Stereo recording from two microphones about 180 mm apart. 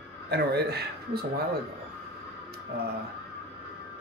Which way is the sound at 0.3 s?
60° right (ahead or behind).